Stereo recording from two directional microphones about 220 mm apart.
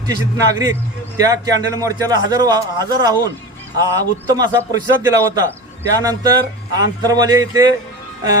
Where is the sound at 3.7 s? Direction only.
15° right (ahead or behind).